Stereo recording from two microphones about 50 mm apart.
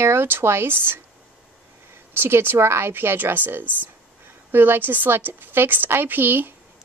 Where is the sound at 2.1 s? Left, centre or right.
Right.